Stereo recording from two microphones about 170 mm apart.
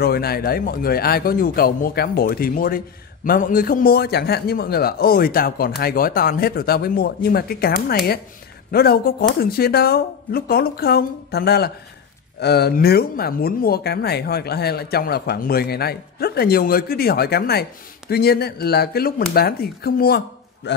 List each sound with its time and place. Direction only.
0.0 s speech: 65° left (ahead or behind)